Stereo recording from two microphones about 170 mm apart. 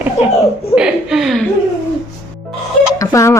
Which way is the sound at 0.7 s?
5° right (ahead or behind).